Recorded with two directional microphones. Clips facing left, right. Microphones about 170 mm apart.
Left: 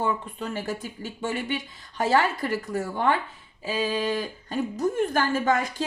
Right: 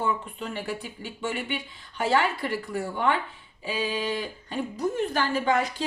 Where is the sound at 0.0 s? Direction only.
40° left (ahead or behind).